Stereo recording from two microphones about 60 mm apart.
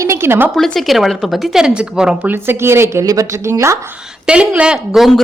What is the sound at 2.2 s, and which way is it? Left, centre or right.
Speech, right.